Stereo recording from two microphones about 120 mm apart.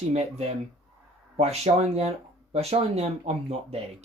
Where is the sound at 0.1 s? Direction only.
65° right (ahead or behind).